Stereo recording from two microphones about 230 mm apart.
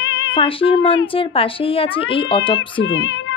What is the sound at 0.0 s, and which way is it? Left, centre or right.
Cat, left.